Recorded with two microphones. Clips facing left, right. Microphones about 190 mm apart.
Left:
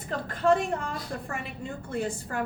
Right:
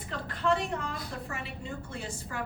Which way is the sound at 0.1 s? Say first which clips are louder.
Left 5 dB; 45° left (ahead or behind).